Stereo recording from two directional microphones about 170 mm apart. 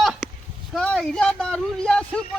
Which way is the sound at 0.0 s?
Centre (ahead or behind).